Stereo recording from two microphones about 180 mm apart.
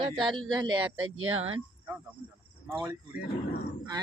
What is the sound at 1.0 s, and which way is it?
Speech, 90° right.